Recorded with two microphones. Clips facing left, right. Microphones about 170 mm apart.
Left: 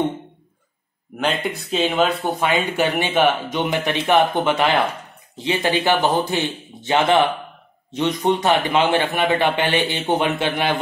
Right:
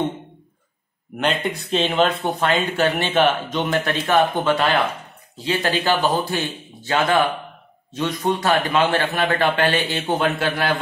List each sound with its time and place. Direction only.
1.1 s a man's voice: centre (ahead or behind); by 10.8 s 20° left (ahead or behind)